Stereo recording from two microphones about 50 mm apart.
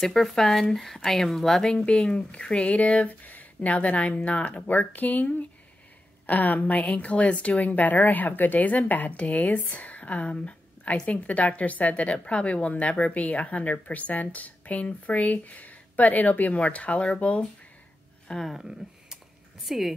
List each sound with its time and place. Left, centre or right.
0.0 s speech: centre
1.7 s a woman's voice: centre
18.5 s a woman's voice: centre